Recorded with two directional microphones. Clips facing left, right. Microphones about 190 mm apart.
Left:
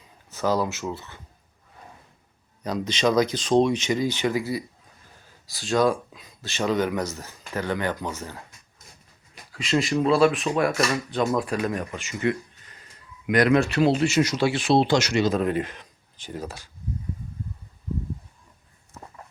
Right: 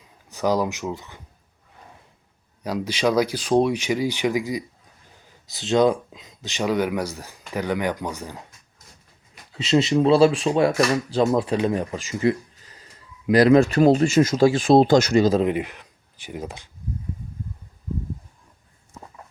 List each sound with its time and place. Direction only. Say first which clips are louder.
0.3 s speech: right 2 dB; 15° right (ahead or behind)
2.6 s speech: right 1 dB; 10° right (ahead or behind)
9.5 s speech: right 4 dB; 25° right (ahead or behind)
15.4 s speech: right 2 dB; 15° right (ahead or behind)